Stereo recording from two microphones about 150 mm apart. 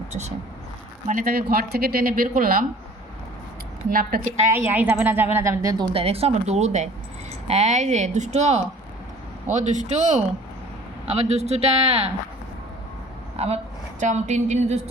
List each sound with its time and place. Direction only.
0.1 s speech: 45° right (ahead or behind)
1.0 s speech: 70° right (ahead or behind)
4.5 s a woman's voice: 15° right (ahead or behind); by 12.1 s 40° right (ahead or behind)
13.4 s speech: 40° right (ahead or behind)